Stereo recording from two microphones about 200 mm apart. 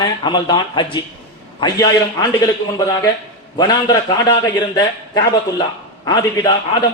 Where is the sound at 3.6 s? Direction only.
20° left (ahead or behind).